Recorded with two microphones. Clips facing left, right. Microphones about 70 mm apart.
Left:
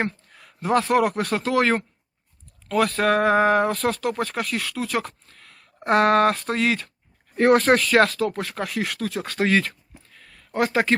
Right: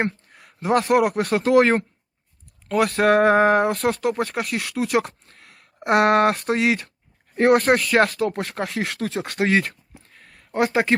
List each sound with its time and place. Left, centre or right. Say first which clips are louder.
0.9 s speech: right 2 dB; centre
1.2 s speech: right 4 dB; right
1.5 s speech: right 5 dB; right
3.8 s speech: right 2 dB; centre
8.4 s speech: right 1 dB; right
9.4 s a sound: even; right